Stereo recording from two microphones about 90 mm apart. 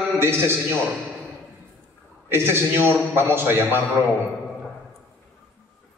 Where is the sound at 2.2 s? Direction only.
25° right (ahead or behind).